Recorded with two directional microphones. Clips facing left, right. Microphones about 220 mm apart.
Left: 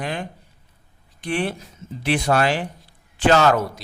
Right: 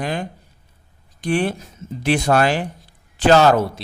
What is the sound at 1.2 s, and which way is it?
A man's voice, 45° right (ahead or behind).